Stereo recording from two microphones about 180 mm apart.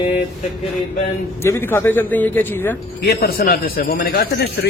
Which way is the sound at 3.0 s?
65° left (ahead or behind).